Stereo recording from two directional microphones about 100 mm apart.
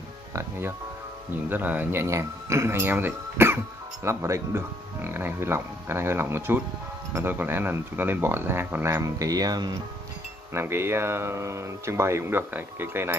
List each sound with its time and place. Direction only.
0.3 s speech: 25° right (ahead or behind)
9.0 s speech: 35° right (ahead or behind)
10.5 s speech: 25° right (ahead or behind)